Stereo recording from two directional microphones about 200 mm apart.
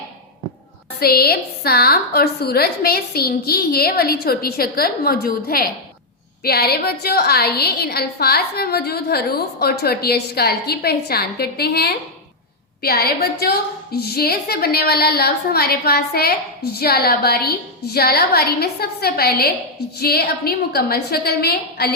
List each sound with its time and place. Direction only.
0.9 s a woman's voice: 50° left (ahead or behind)